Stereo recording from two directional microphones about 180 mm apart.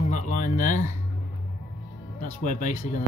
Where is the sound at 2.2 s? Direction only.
45° left (ahead or behind).